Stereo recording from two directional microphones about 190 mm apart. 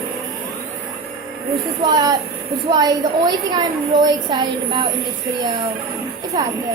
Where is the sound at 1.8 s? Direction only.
20° right (ahead or behind).